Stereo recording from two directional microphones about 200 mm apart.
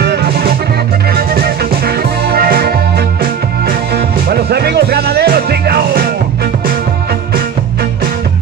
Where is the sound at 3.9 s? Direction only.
50° right (ahead or behind).